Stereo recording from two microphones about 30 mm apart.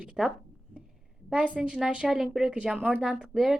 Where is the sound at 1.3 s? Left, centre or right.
Right.